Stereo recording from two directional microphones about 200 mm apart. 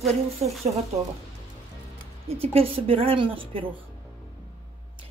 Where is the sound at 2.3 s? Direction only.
30° right (ahead or behind).